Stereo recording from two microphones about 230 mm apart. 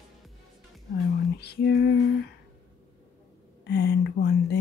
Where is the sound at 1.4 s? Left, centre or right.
Left.